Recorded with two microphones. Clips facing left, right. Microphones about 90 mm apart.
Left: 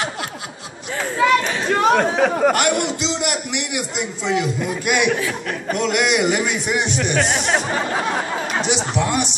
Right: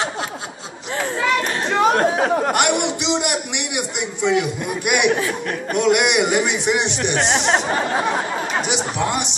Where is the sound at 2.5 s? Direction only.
20° right (ahead or behind).